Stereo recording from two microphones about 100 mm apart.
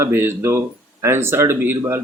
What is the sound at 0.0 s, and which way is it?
Speech, 25° right (ahead or behind).